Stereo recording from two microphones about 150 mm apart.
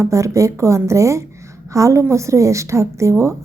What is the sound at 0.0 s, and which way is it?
A woman's voice, 20° right (ahead or behind).